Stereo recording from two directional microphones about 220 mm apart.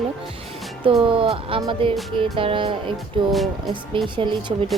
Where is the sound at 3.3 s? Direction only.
Centre (ahead or behind).